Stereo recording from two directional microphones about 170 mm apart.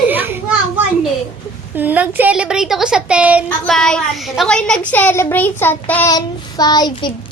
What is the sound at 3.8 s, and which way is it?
A woman's voice, 5° left (ahead or behind).